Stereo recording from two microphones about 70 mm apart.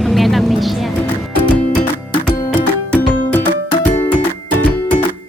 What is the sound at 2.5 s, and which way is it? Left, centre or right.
Music, left.